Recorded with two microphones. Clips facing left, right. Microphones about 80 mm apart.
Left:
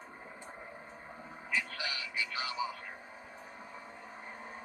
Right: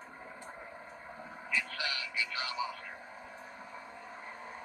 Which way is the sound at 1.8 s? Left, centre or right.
Left.